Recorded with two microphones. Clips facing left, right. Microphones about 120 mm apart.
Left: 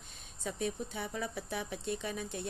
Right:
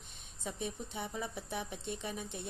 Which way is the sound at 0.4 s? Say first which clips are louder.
Left 4 dB; centre (ahead or behind).